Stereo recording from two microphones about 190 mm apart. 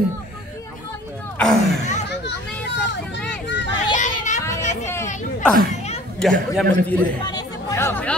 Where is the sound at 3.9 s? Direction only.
40° left (ahead or behind).